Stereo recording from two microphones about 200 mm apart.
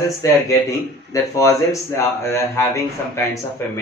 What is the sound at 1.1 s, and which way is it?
Speech, 15° left (ahead or behind).